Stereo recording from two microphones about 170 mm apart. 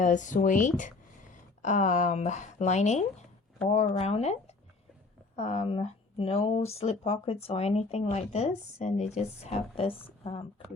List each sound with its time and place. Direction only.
0.0 s speech: 50° left (ahead or behind)
5.4 s speech: 40° left (ahead or behind)